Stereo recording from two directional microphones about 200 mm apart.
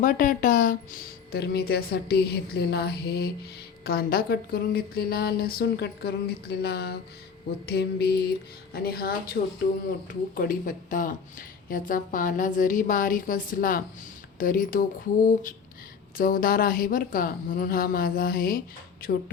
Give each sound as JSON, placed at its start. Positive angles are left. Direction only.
{"t": 0.0, "sound": "speech", "side_deg": 45}